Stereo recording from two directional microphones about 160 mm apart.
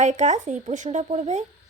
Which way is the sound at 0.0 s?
45° right (ahead or behind).